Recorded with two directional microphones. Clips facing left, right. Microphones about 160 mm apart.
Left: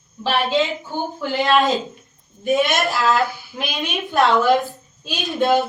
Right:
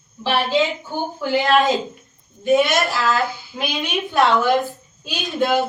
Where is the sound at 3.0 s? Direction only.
20° left (ahead or behind).